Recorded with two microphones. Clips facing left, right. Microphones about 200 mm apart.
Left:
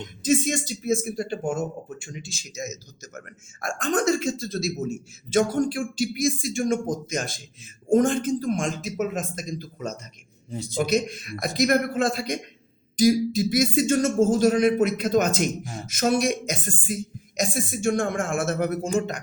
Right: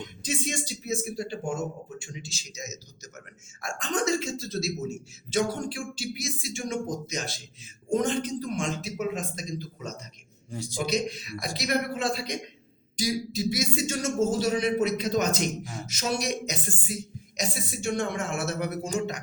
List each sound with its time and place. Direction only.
0.2 s speech: 45° left (ahead or behind)